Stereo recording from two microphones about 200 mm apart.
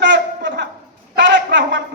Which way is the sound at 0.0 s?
65° right (ahead or behind).